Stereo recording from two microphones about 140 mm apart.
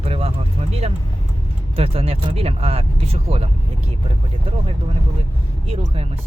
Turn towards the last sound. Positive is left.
turn(degrees=-45)  # may be behind; listen again after turning